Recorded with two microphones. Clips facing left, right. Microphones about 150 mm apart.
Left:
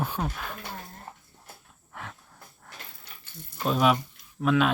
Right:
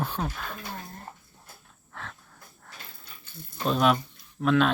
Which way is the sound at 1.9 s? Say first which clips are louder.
Left 1 dB; 15° left (ahead or behind).